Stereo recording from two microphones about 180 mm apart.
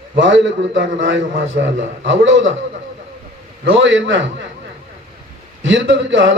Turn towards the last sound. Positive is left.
turn(degrees=-90)